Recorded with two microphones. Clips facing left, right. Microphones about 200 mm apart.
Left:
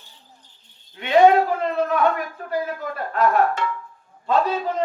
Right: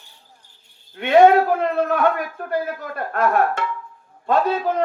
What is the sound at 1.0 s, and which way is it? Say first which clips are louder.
A man's voice: right 2 dB; 55° right (ahead or behind).